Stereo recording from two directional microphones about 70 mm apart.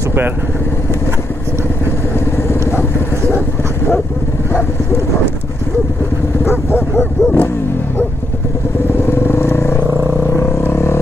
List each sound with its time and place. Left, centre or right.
2.1 s vehicle: left
6.4 s dog: left
8.9 s vehicle: left
10.2 s a sound: left